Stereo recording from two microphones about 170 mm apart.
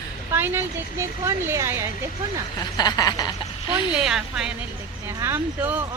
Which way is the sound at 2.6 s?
25° left (ahead or behind).